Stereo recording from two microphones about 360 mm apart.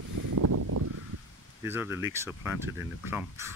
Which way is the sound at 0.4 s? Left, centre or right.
Right.